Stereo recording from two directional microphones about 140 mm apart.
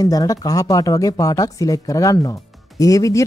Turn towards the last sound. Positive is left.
turn(degrees=25)  # may be behind; listen again after turning